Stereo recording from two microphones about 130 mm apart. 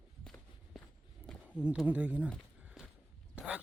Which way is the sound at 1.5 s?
10° right (ahead or behind).